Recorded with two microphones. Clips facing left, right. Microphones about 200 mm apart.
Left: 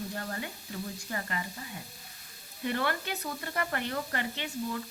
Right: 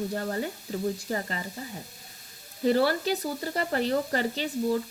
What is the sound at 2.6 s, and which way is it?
Sizzle, 35° right (ahead or behind).